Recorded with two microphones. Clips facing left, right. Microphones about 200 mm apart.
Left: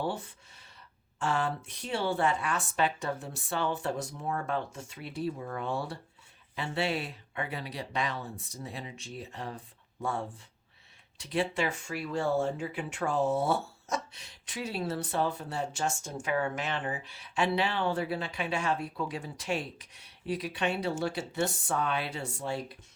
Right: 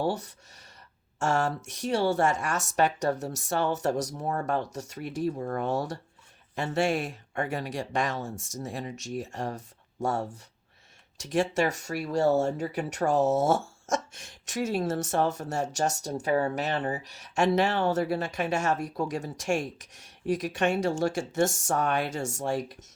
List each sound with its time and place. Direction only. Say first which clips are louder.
0.0 s speech: right 5 dB; 40° right (ahead or behind)